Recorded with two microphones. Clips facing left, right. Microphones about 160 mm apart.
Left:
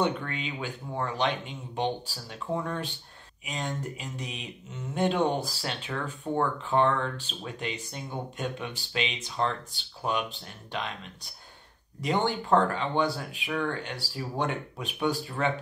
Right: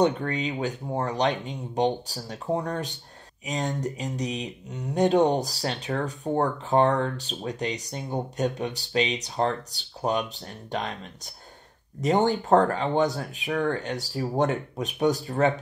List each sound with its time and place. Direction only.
0.0 s speech: 40° right (ahead or behind)